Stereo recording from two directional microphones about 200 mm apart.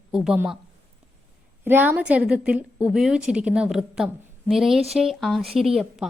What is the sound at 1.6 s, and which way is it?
A woman's voice, 10° right (ahead or behind).